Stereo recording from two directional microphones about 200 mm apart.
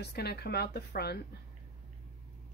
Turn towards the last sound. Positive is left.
turn(degrees=55)  # may be behind; listen again after turning